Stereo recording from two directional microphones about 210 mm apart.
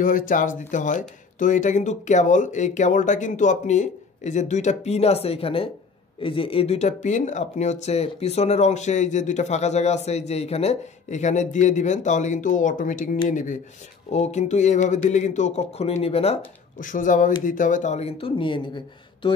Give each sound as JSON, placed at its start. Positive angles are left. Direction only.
{"t": 0.0, "sound": "speech", "side_deg": 40}